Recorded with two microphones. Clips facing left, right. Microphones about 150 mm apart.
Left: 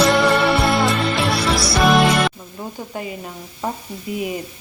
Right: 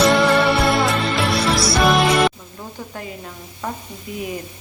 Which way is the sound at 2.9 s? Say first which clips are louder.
Left 5 dB; 15° left (ahead or behind).